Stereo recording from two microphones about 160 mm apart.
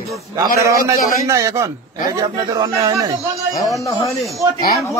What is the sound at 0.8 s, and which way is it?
Speech, 20° right (ahead or behind).